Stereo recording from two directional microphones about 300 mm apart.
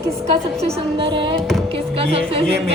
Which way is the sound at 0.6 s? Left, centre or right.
Centre.